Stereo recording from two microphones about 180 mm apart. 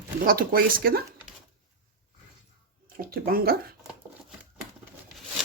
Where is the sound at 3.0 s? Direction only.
55° right (ahead or behind).